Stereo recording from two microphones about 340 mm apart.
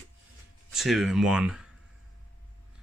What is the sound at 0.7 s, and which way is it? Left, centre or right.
Speech, centre.